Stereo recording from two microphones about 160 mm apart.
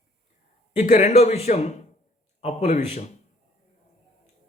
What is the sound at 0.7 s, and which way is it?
A man's voice, 45° left (ahead or behind).